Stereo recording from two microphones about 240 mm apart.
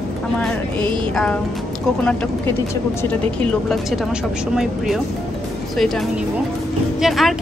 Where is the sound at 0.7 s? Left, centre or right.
Centre.